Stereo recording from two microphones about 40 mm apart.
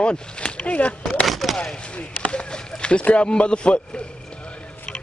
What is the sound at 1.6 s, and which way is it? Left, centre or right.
A man's voice, left.